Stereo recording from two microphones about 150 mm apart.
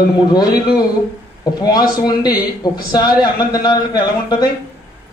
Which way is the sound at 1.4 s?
25° left (ahead or behind).